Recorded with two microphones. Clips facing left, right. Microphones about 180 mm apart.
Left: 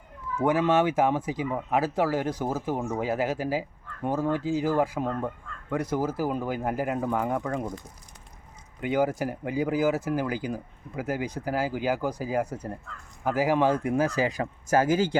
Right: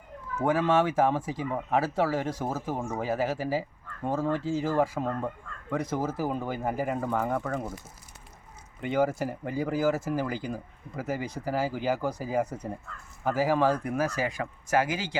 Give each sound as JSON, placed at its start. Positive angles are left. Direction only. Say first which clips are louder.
{"t": 0.3, "sound": "speech", "louder": "left 2 dB", "side_deg": 15}
{"t": 8.8, "sound": "speech", "louder": "left 1 dB", "side_deg": 5}
{"t": 14.7, "sound": "speech", "louder": "left 5 dB", "side_deg": 45}